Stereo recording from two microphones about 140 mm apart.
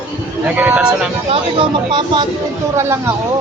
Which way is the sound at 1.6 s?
35° right (ahead or behind).